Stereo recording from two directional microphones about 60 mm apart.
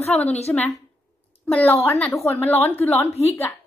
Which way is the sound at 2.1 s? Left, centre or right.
Left.